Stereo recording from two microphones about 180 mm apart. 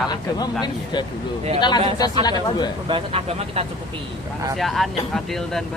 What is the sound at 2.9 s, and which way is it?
Speech, 30° right (ahead or behind).